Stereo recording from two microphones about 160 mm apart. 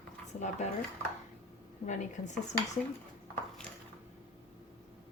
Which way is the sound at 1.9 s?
50° left (ahead or behind).